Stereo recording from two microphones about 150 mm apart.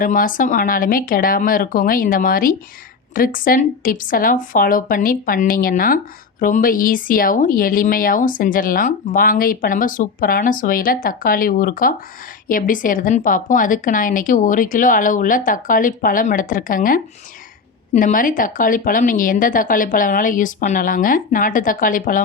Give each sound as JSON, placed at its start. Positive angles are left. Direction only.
{"t": 0.0, "sound": "a woman's voice", "side_deg": 65}